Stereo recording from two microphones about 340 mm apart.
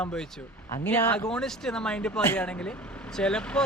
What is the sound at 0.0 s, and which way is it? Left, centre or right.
Speech, centre.